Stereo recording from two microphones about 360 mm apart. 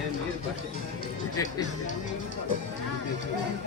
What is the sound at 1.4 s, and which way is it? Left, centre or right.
Speech, centre.